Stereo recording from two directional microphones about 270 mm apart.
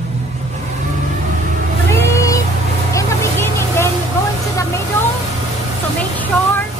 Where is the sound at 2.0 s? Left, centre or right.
Centre.